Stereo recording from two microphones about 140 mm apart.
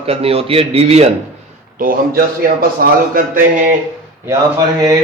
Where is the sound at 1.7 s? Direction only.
90° right.